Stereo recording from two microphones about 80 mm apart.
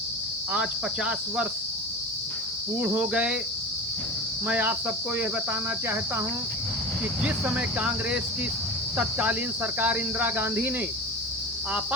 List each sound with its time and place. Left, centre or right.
0.5 s speech: centre
2.7 s speech: centre
4.4 s cricket: centre
7.2 s speech: centre
9.0 s cricket: centre